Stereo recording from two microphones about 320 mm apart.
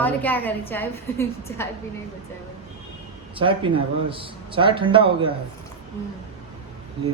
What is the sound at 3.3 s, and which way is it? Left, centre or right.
A man's voice, centre.